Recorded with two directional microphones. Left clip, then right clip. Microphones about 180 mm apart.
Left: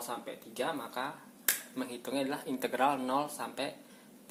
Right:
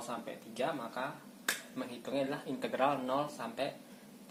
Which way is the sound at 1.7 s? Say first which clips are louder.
Left 1 dB; 45° left (ahead or behind).